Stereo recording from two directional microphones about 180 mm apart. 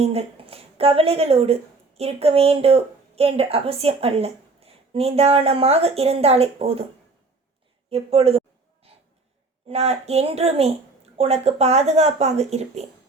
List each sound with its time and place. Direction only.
0.0 s a woman's voice: 35° right (ahead or behind)
7.9 s a sound: 35° right (ahead or behind)
9.6 s a woman's voice: 35° right (ahead or behind)